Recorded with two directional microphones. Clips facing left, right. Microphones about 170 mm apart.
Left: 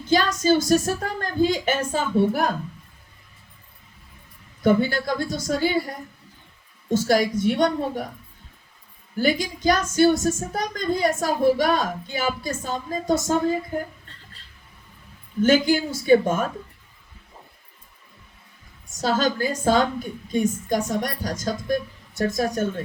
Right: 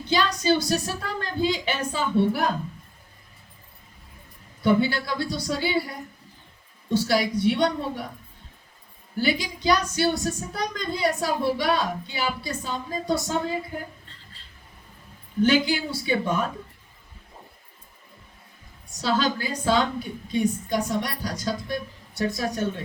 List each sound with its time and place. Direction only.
0.0 s speech: 45° left (ahead or behind)
4.6 s speech: 45° left (ahead or behind)
6.9 s speech: 45° left (ahead or behind)
9.1 s speech: 45° left (ahead or behind)
15.4 s speech: 45° left (ahead or behind)
19.0 s speech: 45° left (ahead or behind)